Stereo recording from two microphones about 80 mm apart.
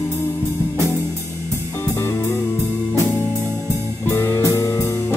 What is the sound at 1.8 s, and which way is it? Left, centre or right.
Music, left.